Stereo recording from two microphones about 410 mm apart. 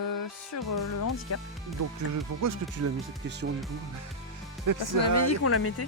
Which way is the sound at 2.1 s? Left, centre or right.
Right.